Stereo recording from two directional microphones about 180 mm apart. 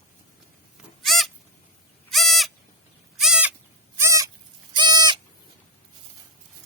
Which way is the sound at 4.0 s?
15° right (ahead or behind).